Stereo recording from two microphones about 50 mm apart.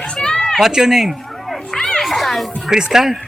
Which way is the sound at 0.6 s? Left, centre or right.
Centre.